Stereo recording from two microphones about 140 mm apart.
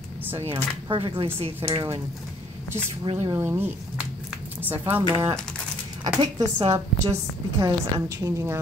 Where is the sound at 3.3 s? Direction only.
20° right (ahead or behind).